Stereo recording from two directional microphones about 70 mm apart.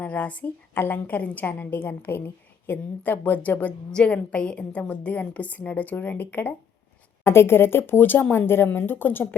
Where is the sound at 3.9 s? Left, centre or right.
Centre.